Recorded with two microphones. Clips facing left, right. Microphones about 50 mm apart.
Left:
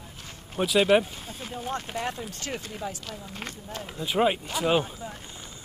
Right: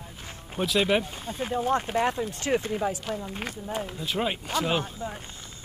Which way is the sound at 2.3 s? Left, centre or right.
Right.